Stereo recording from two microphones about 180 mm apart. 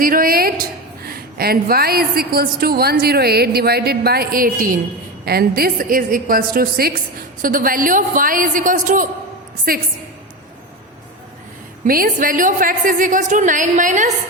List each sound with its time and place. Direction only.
0.0 s a woman's voice: 50° right (ahead or behind)
11.9 s a woman's voice: 50° right (ahead or behind)